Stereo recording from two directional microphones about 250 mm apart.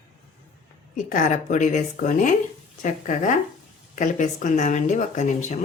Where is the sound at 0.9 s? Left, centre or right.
Left.